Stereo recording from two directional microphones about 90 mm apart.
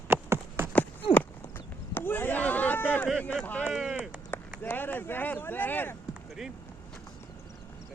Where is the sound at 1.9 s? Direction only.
25° left (ahead or behind).